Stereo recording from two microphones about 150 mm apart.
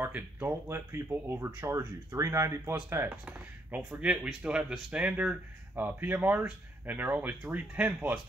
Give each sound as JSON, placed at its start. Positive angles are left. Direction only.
{"t": 0.0, "sound": "speech", "side_deg": -15}